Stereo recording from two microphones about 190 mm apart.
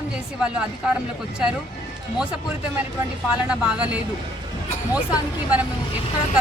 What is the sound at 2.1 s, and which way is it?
Speech, 5° right (ahead or behind).